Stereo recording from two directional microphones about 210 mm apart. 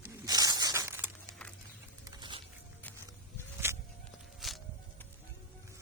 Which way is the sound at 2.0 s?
20° right (ahead or behind).